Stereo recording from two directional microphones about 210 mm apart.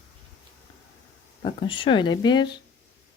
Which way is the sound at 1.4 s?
25° left (ahead or behind).